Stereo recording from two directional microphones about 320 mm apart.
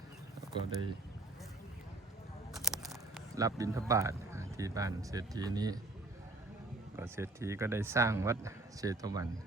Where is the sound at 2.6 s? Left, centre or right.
Centre.